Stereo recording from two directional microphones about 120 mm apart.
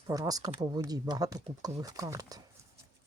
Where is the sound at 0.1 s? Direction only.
30° right (ahead or behind).